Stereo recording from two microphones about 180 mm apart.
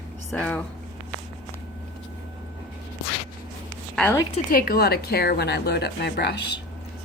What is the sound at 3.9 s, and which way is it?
Speech, 5° left (ahead or behind).